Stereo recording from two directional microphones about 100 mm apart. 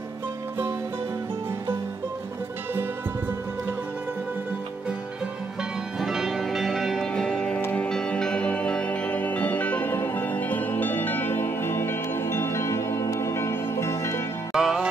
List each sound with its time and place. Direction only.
5.9 s music: 5° right (ahead or behind); by 14.2 s 25° left (ahead or behind)
14.5 s music: 5° right (ahead or behind)